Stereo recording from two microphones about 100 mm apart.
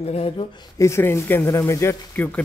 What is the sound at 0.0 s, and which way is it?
Speech, 90° left.